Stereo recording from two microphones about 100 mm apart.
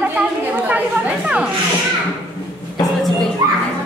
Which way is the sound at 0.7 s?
15° right (ahead or behind).